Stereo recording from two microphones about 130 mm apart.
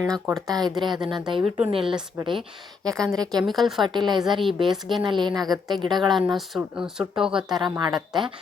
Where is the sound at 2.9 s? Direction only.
5° left (ahead or behind).